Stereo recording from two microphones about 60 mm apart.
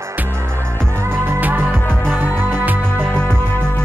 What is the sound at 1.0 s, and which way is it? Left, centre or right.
Music, right.